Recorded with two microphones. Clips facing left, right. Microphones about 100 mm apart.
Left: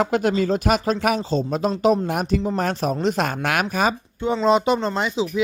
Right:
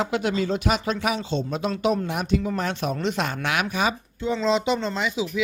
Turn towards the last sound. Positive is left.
turn(degrees=40)  # may be behind; listen again after turning